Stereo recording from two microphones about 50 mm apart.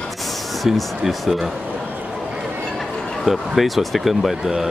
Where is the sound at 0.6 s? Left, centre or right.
Centre.